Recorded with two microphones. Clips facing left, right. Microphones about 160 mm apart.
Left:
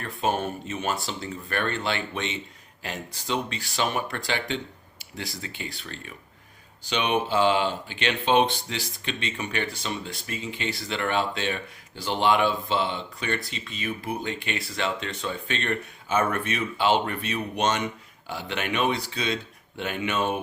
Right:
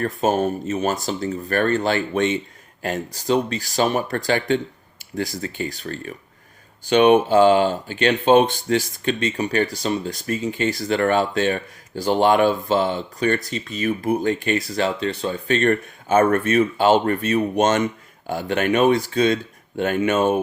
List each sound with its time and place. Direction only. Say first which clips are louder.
0.0 s speech: right 7 dB; 40° right (ahead or behind)